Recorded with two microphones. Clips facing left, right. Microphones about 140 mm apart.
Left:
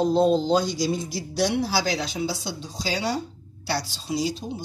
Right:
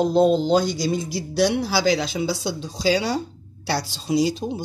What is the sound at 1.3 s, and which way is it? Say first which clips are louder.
Speech: right 3 dB; 90° right.